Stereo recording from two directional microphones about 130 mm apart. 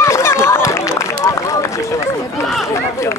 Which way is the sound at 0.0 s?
20° left (ahead or behind).